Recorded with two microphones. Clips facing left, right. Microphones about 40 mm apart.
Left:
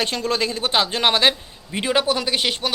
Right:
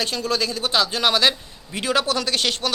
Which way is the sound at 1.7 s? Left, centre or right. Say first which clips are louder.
Left 1 dB; left.